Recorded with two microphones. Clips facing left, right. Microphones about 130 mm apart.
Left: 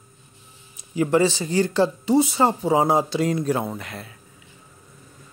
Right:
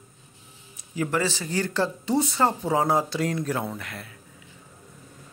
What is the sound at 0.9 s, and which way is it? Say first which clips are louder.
Speech: left 7 dB; 20° left (ahead or behind).